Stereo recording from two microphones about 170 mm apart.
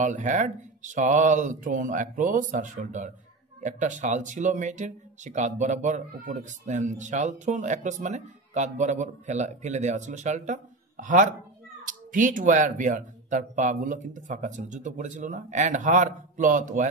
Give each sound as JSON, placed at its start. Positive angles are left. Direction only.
{"t": 0.0, "sound": "speech", "side_deg": -45}